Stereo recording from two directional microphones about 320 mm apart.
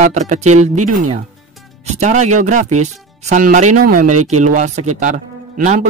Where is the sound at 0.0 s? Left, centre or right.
Right.